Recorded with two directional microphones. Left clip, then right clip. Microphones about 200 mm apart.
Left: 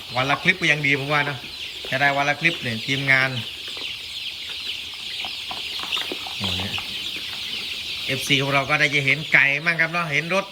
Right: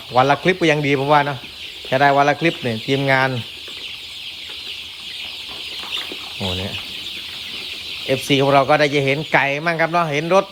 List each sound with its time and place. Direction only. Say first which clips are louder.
0.2 s speech: right 5 dB; 20° right (ahead or behind)
8.1 s speech: right 6 dB; 15° right (ahead or behind)